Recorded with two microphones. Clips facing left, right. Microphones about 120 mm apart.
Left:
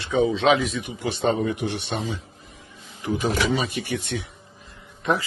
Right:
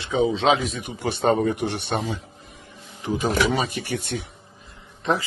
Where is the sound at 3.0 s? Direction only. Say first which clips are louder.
Even; 35° right (ahead or behind).